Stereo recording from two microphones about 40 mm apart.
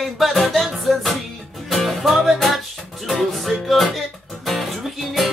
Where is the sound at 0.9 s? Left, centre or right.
Centre.